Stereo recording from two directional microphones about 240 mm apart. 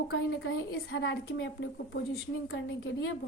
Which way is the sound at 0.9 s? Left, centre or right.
Left.